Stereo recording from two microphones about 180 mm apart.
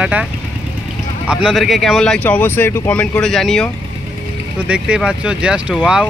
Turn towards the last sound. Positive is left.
turn(degrees=-5)  # may be behind; listen again after turning